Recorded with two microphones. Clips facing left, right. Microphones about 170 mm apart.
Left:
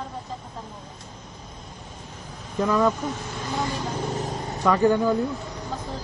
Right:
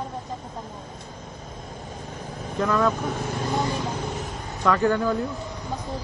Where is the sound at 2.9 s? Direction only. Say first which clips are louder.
Right 2 dB; 60° right (ahead or behind).